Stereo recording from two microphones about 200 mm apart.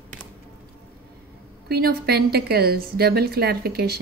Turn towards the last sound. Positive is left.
turn(degrees=-50)  # may be behind; listen again after turning